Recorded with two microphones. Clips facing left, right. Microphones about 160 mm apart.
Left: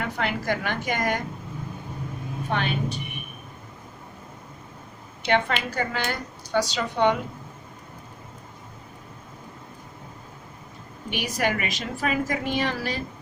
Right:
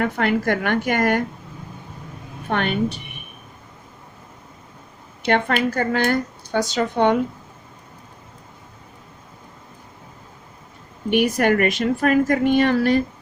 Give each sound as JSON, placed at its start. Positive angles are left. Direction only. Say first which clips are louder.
{"t": 0.0, "sound": "a woman's voice", "louder": "right 8 dB", "side_deg": -55}
{"t": 2.5, "sound": "a woman's voice", "louder": "right 5 dB", "side_deg": -55}
{"t": 5.2, "sound": "speech", "louder": "right 4 dB", "side_deg": -50}
{"t": 11.1, "sound": "a woman's voice", "louder": "right 9 dB", "side_deg": -55}